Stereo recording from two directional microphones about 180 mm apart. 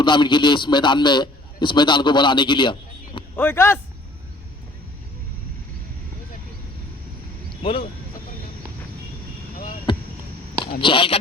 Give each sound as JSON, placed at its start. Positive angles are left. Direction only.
{"t": 0.0, "sound": "a man's voice", "side_deg": 25}
{"t": 3.3, "sound": "a man's voice", "side_deg": 10}
{"t": 7.6, "sound": "speech", "side_deg": 30}
{"t": 10.8, "sound": "a man's voice", "side_deg": 30}